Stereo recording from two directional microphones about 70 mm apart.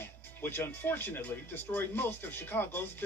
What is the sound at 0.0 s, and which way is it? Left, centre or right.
Speech, left.